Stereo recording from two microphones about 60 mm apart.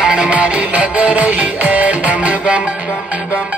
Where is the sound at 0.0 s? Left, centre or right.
Centre.